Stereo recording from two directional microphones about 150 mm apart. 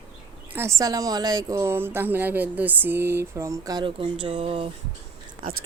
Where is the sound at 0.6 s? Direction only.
20° right (ahead or behind); by 4.7 s 40° right (ahead or behind).